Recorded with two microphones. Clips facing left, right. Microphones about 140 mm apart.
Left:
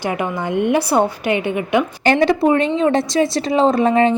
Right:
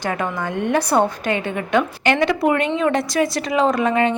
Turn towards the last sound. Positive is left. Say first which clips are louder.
# left 4 dB
turn(degrees=30)  # may be behind; listen again after turning